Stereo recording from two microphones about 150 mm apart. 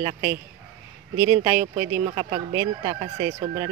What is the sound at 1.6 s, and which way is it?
Speech, 15° right (ahead or behind).